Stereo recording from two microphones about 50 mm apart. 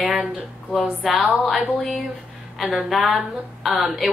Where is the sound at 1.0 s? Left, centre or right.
Centre.